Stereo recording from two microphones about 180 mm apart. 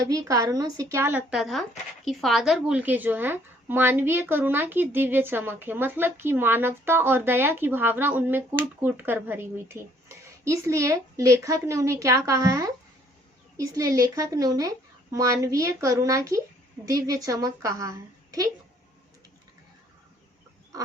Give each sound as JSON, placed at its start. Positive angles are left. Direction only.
{"t": 0.0, "sound": "a woman's voice", "side_deg": -20}